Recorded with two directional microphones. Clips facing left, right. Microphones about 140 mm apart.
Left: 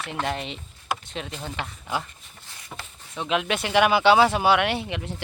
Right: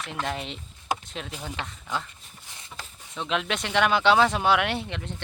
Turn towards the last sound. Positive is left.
turn(degrees=5)  # may be behind; listen again after turning